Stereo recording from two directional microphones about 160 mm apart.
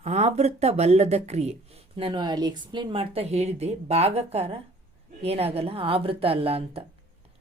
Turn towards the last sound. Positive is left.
turn(degrees=-40)  # may be behind; listen again after turning